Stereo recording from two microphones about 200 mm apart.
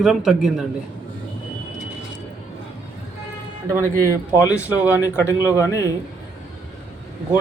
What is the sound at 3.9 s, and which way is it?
Speech, 10° left (ahead or behind).